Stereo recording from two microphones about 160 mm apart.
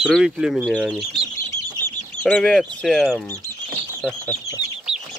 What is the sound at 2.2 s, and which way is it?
Speech, 10° left (ahead or behind).